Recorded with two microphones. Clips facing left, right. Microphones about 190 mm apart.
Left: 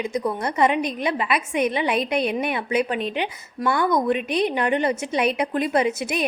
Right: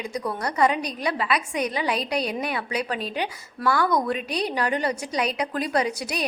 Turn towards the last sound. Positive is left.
turn(degrees=25)  # may be behind; listen again after turning